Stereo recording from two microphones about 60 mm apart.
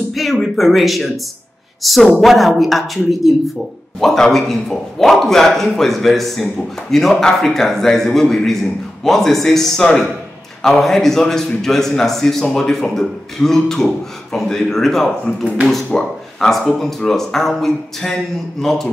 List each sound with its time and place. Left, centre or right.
0.1 s a man's voice: centre